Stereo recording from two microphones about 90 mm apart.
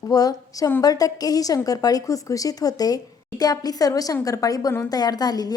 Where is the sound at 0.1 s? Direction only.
45° left (ahead or behind).